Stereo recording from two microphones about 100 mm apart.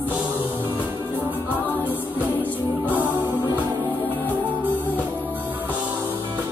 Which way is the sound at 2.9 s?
15° right (ahead or behind).